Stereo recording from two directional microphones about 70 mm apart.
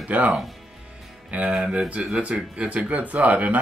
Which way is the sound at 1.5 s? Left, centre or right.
Centre.